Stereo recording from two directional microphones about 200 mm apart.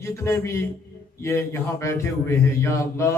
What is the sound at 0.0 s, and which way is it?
A man's voice, 15° left (ahead or behind).